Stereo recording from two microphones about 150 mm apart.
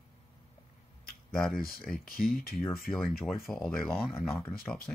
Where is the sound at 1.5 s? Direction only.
70° left (ahead or behind).